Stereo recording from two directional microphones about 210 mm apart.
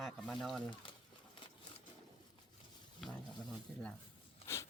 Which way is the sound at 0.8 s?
25° left (ahead or behind).